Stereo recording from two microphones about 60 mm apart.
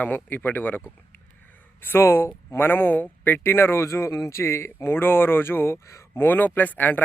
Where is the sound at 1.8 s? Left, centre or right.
Left.